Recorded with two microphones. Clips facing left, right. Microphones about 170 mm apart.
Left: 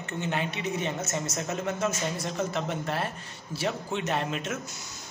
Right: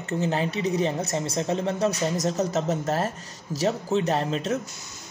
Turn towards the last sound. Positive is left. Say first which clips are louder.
# right 5 dB
turn(degrees=-35)  # may be behind; listen again after turning